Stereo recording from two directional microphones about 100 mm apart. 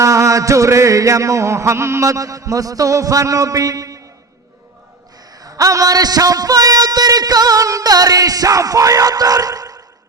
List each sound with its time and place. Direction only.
0.0 s a man's voice: 30° right (ahead or behind)
5.3 s a man's voice: 40° right (ahead or behind)